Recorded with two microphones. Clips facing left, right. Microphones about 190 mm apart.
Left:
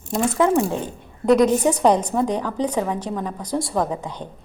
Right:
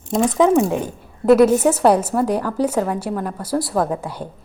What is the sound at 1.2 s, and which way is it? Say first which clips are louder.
A woman's voice: right 3 dB; 5° right (ahead or behind).